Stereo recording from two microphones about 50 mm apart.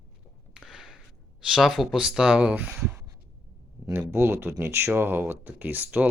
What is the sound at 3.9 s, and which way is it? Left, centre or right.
Speech, right.